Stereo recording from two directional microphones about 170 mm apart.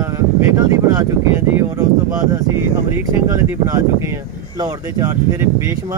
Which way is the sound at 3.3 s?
20° right (ahead or behind).